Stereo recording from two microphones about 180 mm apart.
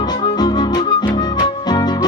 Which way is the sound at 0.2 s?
25° left (ahead or behind).